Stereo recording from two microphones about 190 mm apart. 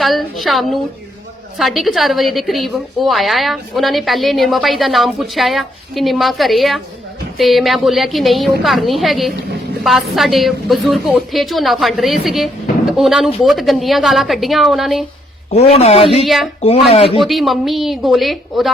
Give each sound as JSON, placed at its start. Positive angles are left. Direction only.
{"t": 0.0, "sound": "a woman's voice", "side_deg": 0}
{"t": 15.5, "sound": "speech", "side_deg": 35}
{"t": 16.2, "sound": "a woman's voice", "side_deg": 0}
{"t": 16.6, "sound": "speech", "side_deg": 35}
{"t": 17.2, "sound": "a woman's voice", "side_deg": 0}